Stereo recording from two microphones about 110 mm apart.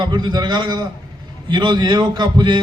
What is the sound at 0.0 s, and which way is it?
A man's voice, 40° right (ahead or behind).